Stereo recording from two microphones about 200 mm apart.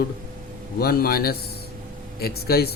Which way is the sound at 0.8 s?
50° left (ahead or behind).